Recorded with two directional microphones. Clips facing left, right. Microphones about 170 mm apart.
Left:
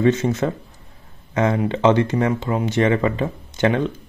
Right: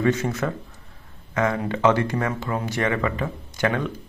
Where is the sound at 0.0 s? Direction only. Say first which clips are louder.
Left 4 dB; 25° left (ahead or behind).